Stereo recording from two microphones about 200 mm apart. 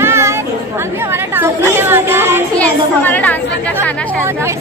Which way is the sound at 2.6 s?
10° left (ahead or behind).